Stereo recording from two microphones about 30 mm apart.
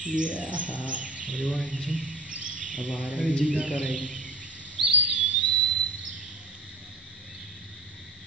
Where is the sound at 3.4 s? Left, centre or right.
Right.